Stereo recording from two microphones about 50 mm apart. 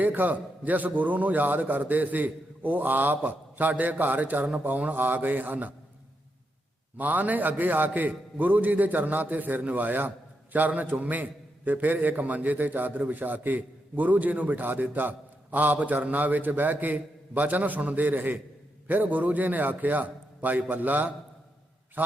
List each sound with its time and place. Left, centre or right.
0.0 s a man's voice: right
6.9 s a man's voice: right